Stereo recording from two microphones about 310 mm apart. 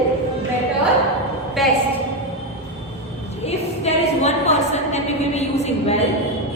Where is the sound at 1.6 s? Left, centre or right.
Centre.